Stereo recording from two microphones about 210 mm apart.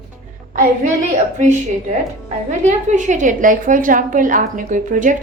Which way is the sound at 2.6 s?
35° right (ahead or behind).